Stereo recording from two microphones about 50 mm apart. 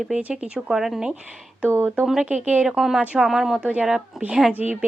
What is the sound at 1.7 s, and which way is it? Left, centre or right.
Speech, right.